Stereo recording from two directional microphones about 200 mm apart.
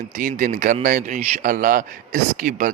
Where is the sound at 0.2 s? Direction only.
40° right (ahead or behind).